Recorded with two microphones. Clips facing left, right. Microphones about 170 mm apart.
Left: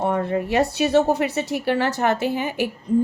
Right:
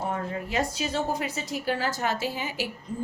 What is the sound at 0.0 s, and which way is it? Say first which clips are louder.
Speech: left 9 dB; 70° left (ahead or behind).